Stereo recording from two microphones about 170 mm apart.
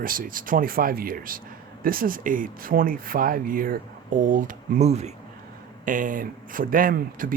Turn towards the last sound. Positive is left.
turn(degrees=-55)  # may be behind; listen again after turning